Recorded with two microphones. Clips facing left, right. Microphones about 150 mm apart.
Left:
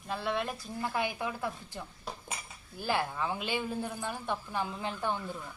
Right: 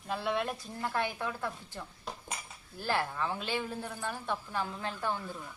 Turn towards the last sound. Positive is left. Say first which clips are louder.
# left 1 dB
turn(degrees=15)  # may be behind; listen again after turning